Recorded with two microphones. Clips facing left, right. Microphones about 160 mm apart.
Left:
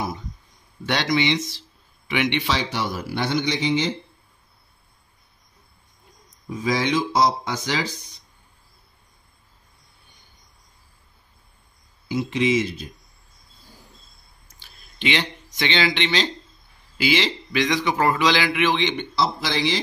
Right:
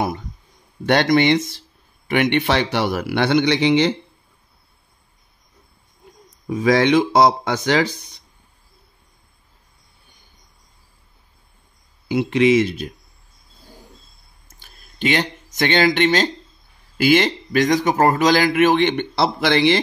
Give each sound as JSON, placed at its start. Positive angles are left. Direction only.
{"t": 0.8, "sound": "a man's voice", "side_deg": -55}
{"t": 6.4, "sound": "speech", "side_deg": -65}
{"t": 12.1, "sound": "speech", "side_deg": -65}
{"t": 14.5, "sound": "a sound", "side_deg": -45}
{"t": 17.0, "sound": "a man's voice", "side_deg": -50}